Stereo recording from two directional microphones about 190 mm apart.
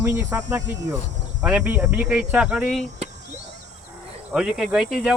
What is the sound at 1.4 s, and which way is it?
Speech, 5° right (ahead or behind).